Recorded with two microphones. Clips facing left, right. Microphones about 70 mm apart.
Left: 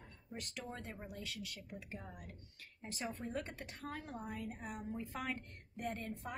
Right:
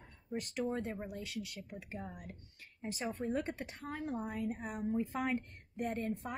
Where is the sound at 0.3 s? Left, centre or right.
Right.